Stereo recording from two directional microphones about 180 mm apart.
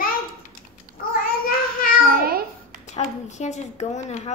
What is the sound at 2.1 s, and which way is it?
Babbling, 55° right (ahead or behind).